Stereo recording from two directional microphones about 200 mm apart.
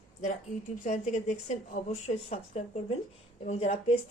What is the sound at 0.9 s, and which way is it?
Speech, 35° left (ahead or behind).